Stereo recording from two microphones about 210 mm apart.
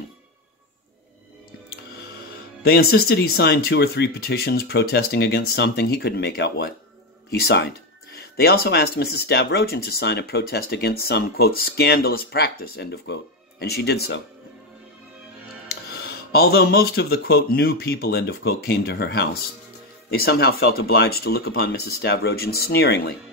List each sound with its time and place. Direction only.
2.6 s speech: 50° left (ahead or behind)
15.7 s speech: 45° left (ahead or behind)